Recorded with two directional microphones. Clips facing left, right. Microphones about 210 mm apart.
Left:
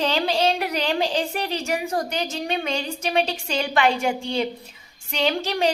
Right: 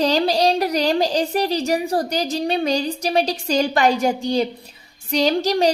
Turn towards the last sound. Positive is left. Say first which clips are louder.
# right 5 dB
turn(degrees=-40)  # may be behind; listen again after turning